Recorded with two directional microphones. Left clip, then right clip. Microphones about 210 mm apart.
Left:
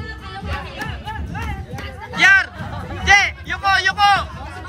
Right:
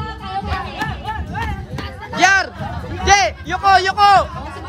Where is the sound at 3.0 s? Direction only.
25° right (ahead or behind).